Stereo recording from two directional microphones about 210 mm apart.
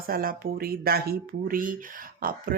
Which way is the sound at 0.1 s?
45° right (ahead or behind).